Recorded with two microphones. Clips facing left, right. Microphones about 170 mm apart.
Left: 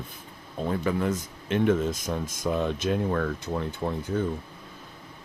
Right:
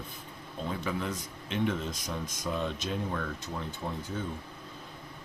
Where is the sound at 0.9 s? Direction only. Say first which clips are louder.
Left 7 dB; 50° left (ahead or behind).